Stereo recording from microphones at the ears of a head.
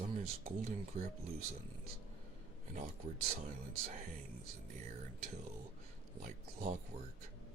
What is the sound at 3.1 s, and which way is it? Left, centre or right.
Speech, right.